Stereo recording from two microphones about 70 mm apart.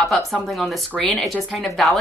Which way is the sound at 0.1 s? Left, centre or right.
Centre.